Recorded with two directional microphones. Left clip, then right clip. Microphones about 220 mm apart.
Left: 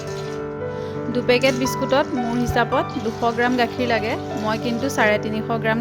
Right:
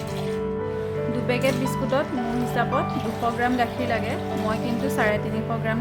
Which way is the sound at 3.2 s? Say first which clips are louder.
Left 4 dB; 40° left (ahead or behind).